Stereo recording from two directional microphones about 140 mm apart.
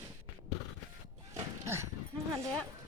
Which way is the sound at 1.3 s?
20° right (ahead or behind).